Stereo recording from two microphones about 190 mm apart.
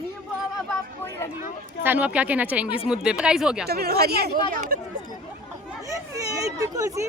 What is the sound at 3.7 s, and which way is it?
Speech, 55° right (ahead or behind).